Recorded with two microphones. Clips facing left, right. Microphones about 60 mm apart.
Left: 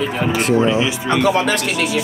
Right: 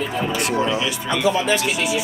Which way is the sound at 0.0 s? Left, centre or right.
Left.